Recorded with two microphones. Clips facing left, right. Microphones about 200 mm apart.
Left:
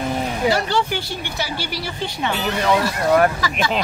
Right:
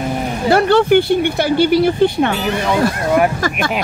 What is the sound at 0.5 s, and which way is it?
Speech, 55° right (ahead or behind).